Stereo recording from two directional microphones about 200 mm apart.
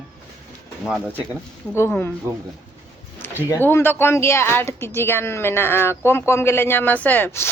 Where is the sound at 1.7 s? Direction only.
10° left (ahead or behind).